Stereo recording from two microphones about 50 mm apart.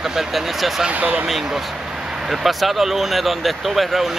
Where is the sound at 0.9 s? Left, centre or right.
Right.